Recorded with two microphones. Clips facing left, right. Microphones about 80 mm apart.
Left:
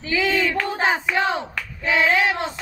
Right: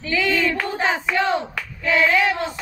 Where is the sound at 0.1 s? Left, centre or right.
Centre.